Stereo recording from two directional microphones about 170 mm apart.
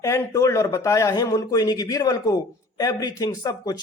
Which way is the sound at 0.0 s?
15° left (ahead or behind).